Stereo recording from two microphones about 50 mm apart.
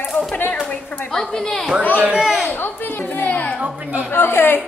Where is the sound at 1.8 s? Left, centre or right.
Left.